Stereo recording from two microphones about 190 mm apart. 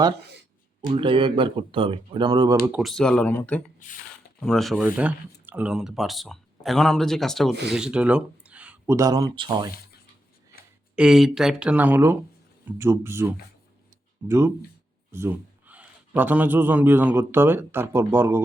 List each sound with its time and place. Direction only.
0.9 s speech: 25° right (ahead or behind)
2.6 s speech: 5° right (ahead or behind); by 9.7 s 20° right (ahead or behind)
10.9 s speech: 5° right (ahead or behind)
14.3 s a man's voice: 15° right (ahead or behind)